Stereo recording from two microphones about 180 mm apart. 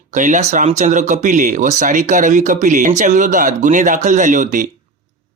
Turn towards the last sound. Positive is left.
turn(degrees=-45)  # may be behind; listen again after turning